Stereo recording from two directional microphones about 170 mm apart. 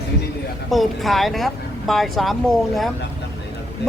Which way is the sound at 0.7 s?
Centre (ahead or behind).